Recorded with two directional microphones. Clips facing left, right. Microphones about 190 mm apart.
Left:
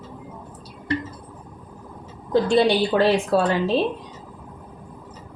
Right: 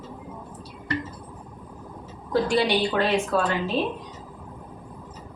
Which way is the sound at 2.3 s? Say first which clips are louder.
Left 4 dB; 25° left (ahead or behind).